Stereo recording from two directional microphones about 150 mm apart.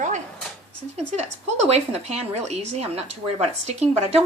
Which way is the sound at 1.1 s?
45° right (ahead or behind).